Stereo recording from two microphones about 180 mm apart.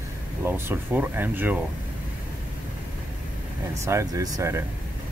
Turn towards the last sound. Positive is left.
turn(degrees=-15)  # may be behind; listen again after turning